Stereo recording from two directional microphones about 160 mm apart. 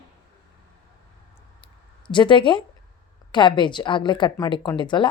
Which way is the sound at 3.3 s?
30° left (ahead or behind).